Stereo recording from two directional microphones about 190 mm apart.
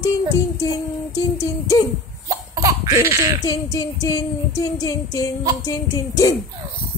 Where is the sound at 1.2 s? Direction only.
15° left (ahead or behind).